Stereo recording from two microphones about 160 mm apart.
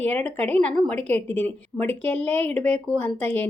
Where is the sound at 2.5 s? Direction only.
45° right (ahead or behind).